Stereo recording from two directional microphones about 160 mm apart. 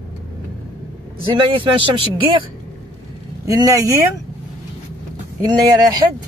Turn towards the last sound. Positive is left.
turn(degrees=-25)  # may be behind; listen again after turning